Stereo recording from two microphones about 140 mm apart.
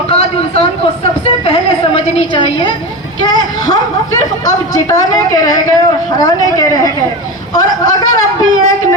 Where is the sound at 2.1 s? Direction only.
35° left (ahead or behind).